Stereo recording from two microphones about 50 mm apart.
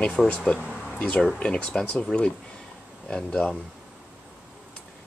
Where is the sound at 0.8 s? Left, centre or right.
Left.